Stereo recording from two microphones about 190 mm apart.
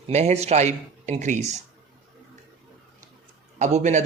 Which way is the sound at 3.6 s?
40° right (ahead or behind).